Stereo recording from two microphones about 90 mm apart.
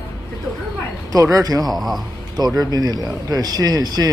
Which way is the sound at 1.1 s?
40° right (ahead or behind).